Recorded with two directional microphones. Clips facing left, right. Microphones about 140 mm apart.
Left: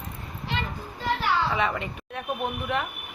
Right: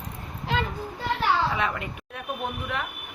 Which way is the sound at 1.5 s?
Centre (ahead or behind).